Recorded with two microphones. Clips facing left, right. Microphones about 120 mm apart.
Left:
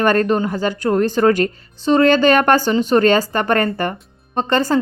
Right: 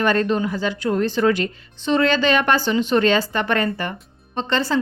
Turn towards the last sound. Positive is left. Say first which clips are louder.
# left 5 dB
turn(degrees=45)  # may be behind; listen again after turning